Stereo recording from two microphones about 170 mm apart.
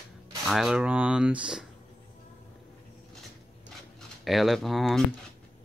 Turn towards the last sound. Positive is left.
turn(degrees=0)  # may be behind; listen again after turning